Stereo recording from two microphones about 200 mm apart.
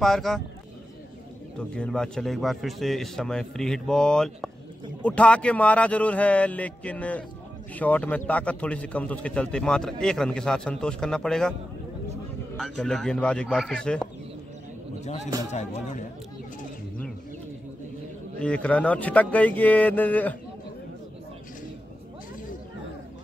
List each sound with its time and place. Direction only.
0.0 s a man's voice: centre (ahead or behind)
1.6 s a man's voice: 5° left (ahead or behind)
12.5 s a man's voice: centre (ahead or behind)
15.5 s speech: 35° left (ahead or behind)
18.4 s speech: 5° left (ahead or behind)